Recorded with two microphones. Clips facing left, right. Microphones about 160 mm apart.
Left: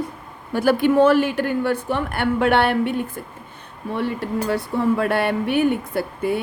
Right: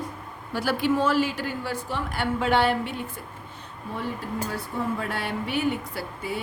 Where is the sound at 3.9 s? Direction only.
75° left (ahead or behind).